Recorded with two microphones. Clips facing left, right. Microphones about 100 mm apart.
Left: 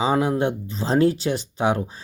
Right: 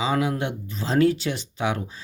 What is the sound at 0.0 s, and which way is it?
Speech, 35° left (ahead or behind).